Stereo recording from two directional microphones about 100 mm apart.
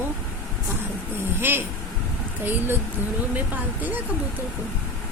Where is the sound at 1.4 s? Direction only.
20° right (ahead or behind).